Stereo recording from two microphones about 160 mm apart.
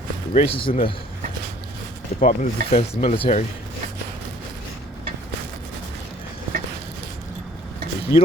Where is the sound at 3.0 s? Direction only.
35° left (ahead or behind).